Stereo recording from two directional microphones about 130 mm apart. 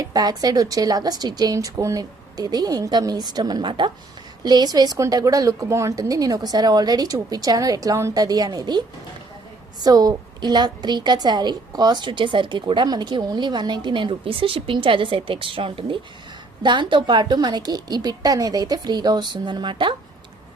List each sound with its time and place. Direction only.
0.0 s a woman's voice: 30° right (ahead or behind)
9.8 s a woman's voice: 30° right (ahead or behind)